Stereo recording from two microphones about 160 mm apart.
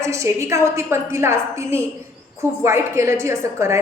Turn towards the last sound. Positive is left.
turn(degrees=-15)  # may be behind; listen again after turning